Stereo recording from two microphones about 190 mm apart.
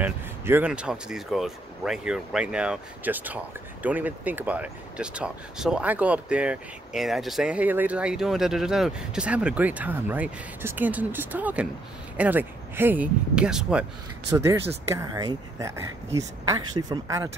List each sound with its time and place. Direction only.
0.0 s speech: 10° right (ahead or behind)
14.3 s speech: 15° right (ahead or behind)